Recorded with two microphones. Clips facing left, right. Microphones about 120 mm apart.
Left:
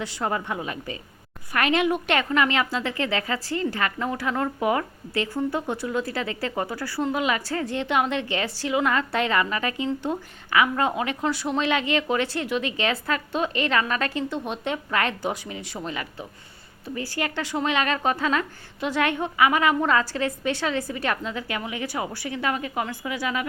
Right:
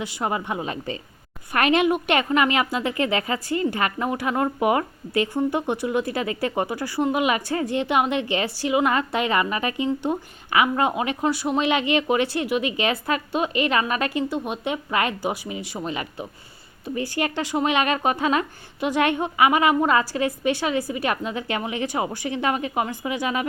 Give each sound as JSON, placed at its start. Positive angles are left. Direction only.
{"t": 0.0, "sound": "a woman's voice", "side_deg": -15}